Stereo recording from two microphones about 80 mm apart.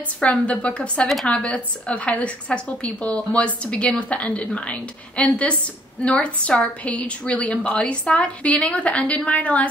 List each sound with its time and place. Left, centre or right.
0.2 s a woman's voice: centre